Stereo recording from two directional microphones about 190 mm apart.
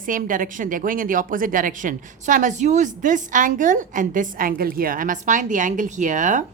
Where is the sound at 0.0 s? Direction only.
45° right (ahead or behind).